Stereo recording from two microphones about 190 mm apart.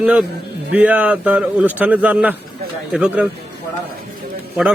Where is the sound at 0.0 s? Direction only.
5° right (ahead or behind).